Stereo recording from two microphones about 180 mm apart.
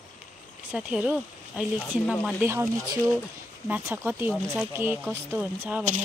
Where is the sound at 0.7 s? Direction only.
5° right (ahead or behind).